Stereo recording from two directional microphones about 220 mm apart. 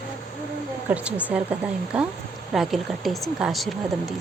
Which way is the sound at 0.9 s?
5° right (ahead or behind).